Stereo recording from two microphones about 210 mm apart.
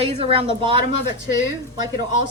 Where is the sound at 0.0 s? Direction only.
30° right (ahead or behind).